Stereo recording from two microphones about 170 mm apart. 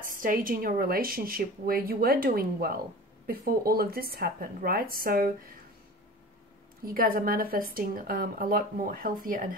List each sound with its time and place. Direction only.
0.0 s a woman's voice: 55° right (ahead or behind)
6.8 s a woman's voice: 60° right (ahead or behind)